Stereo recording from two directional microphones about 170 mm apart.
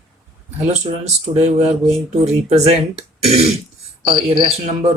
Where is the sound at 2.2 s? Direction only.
40° right (ahead or behind).